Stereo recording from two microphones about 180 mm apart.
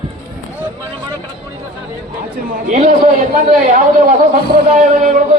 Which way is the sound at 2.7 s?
45° right (ahead or behind).